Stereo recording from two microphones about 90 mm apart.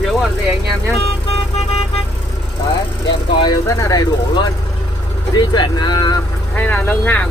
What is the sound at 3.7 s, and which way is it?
Speech, 40° left (ahead or behind).